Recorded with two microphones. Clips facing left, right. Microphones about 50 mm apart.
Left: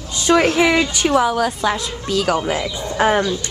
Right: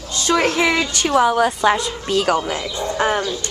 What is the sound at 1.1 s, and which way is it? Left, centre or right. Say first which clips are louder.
A woman's voice: right 3 dB; centre.